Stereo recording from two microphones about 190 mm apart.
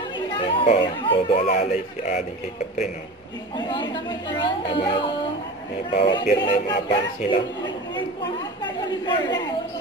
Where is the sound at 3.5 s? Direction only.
25° left (ahead or behind).